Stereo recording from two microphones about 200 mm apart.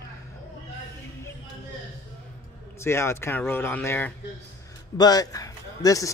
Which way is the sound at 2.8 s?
15° left (ahead or behind).